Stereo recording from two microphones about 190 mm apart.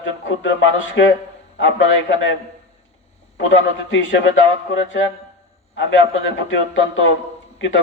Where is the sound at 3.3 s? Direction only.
75° left (ahead or behind).